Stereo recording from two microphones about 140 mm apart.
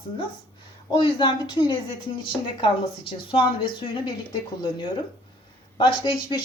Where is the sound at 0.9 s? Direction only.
35° left (ahead or behind).